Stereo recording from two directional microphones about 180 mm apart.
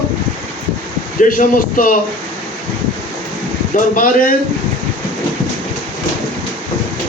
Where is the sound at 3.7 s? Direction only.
50° left (ahead or behind).